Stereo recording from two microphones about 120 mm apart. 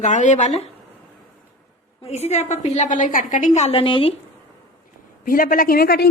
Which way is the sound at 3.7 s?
45° left (ahead or behind).